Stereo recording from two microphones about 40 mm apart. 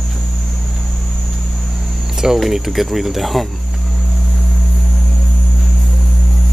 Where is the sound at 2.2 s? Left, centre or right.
Centre.